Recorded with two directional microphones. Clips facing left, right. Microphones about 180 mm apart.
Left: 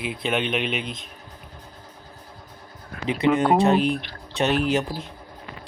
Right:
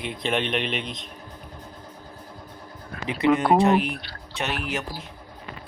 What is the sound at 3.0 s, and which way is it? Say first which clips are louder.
Speech: left 1 dB; 25° left (ahead or behind).